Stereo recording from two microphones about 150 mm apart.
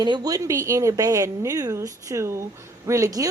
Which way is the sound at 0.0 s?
30° right (ahead or behind).